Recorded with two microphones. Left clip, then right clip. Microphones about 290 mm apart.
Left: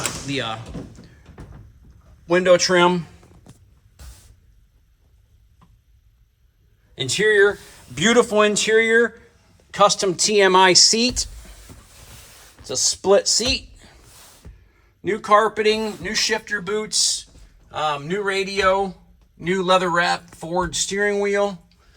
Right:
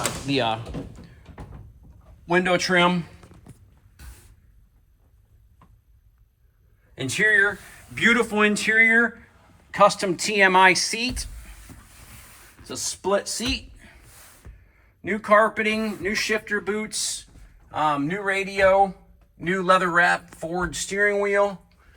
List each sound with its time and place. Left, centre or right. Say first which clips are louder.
0.3 s speech: right 5 dB; centre
2.2 s speech: left 6 dB; centre
6.9 s speech: left 2 dB; centre
12.7 s speech: left 7 dB; left
14.4 s a sound: left 2 dB; centre
15.0 s speech: left 2 dB; centre